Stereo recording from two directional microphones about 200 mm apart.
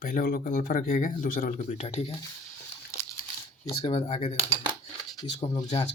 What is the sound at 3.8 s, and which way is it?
Speech, 30° left (ahead or behind).